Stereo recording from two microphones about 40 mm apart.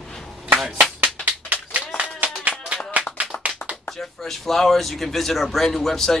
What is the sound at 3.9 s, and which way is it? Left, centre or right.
Speech, centre.